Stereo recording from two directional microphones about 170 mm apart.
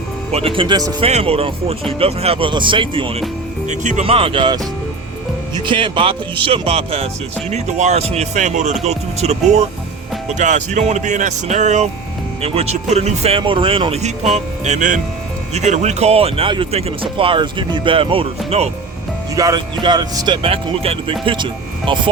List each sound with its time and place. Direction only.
0.3 s speech: 35° right (ahead or behind)
1.0 s speech: 35° right (ahead or behind)
3.7 s speech: 45° right (ahead or behind)
19.4 s speech: 25° right (ahead or behind)